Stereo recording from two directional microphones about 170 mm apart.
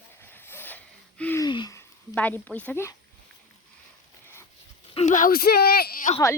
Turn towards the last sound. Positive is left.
turn(degrees=55)  # may be behind; listen again after turning